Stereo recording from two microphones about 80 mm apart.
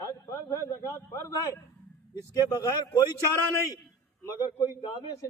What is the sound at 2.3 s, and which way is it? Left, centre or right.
Speech, left.